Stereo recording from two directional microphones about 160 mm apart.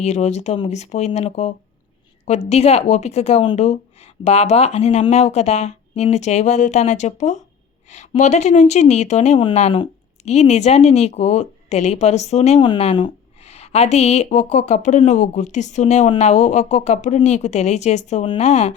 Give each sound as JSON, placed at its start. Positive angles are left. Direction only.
{"t": 0.0, "sound": "a woman's voice", "side_deg": 45}